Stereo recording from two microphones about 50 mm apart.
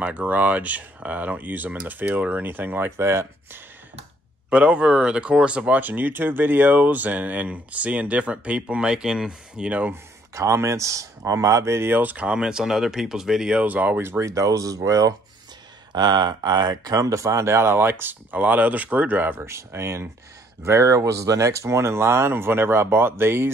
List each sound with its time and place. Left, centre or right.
0.0 s speech: right
3.0 s speech: right
4.5 s speech: right
5.7 s speech: right; by 9.8 s centre
10.3 s speech: right
11.9 s speech: right
12.4 s speech: centre
13.6 s speech: right
14.2 s speech: right
14.8 s speech: right
17.0 s speech: right
18.3 s speech: right
19.4 s speech: right
20.6 s speech: right